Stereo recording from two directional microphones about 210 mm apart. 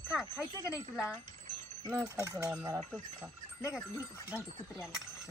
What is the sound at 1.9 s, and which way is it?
Speech, 15° right (ahead or behind).